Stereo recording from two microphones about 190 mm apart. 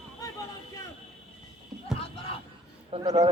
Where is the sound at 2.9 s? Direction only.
30° right (ahead or behind).